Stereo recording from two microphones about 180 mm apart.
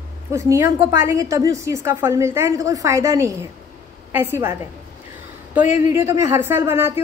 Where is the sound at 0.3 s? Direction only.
15° right (ahead or behind).